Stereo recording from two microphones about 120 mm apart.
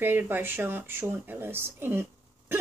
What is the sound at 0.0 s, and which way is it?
Speech, 15° right (ahead or behind).